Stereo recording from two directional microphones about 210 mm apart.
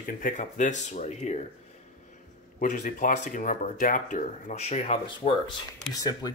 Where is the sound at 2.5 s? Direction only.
35° left (ahead or behind).